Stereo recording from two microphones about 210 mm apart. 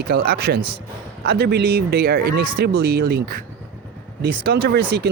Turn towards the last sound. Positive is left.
turn(degrees=-50)  # may be behind; listen again after turning